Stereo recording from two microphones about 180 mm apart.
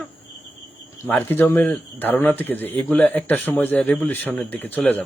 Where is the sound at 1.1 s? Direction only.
10° left (ahead or behind).